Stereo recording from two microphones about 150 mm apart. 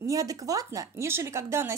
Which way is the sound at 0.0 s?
20° right (ahead or behind).